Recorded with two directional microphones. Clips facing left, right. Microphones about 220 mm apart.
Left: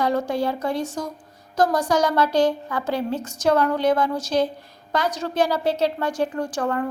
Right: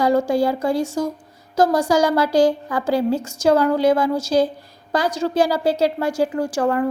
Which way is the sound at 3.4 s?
30° right (ahead or behind).